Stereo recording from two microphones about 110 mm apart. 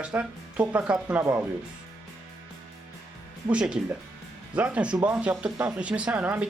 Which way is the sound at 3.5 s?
10° right (ahead or behind).